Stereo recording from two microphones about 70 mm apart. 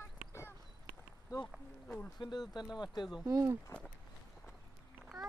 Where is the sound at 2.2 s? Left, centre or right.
Left.